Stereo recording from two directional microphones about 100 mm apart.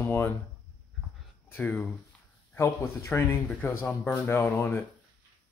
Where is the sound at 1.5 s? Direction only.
15° left (ahead or behind).